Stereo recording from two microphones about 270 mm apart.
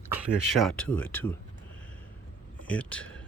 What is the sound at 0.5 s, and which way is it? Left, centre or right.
Speech, centre.